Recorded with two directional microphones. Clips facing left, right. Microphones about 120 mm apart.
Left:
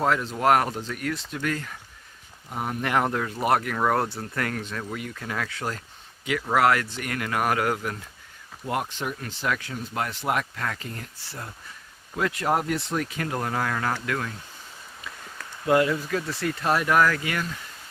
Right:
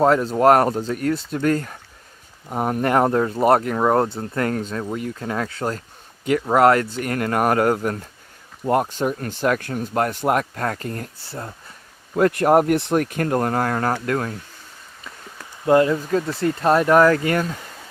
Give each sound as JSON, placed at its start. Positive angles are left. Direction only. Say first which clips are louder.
{"t": 0.0, "sound": "speech", "louder": "right 8 dB", "side_deg": -40}
{"t": 11.3, "sound": "speech", "louder": "right 5 dB", "side_deg": -30}
{"t": 12.1, "sound": "speech", "louder": "right 9 dB", "side_deg": -50}
{"t": 15.6, "sound": "speech", "louder": "right 5 dB", "side_deg": -30}